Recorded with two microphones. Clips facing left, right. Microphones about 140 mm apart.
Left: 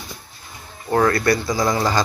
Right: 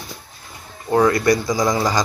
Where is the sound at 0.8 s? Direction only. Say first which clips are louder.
Right 2 dB; 10° right (ahead or behind).